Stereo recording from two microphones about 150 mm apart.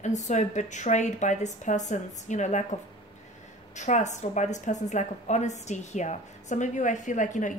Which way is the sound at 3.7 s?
50° left (ahead or behind).